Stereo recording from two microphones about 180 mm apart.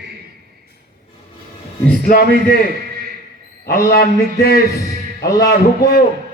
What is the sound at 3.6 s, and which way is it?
Speech, 55° left (ahead or behind).